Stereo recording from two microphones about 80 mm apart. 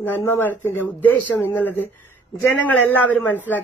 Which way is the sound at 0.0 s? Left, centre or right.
Left.